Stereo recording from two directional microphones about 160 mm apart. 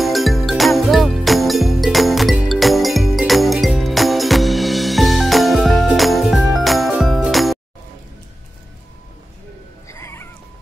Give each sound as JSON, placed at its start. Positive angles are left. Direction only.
{"t": 0.0, "sound": "music", "side_deg": 0}
{"t": 9.8, "sound": "music", "side_deg": 15}